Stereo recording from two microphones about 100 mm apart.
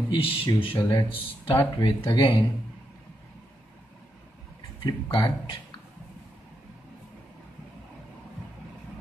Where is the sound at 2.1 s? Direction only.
55° left (ahead or behind).